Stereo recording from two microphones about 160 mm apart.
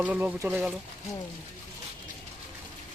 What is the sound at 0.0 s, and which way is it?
Speech, 10° right (ahead or behind).